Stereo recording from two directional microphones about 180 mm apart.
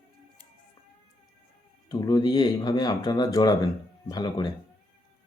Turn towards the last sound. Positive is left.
turn(degrees=20)  # may be behind; listen again after turning